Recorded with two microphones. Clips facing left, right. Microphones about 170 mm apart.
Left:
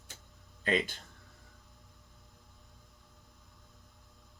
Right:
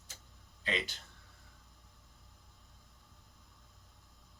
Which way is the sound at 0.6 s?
50° left (ahead or behind).